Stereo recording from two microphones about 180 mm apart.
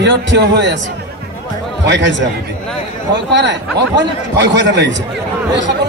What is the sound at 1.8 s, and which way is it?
A man's voice, 80° right.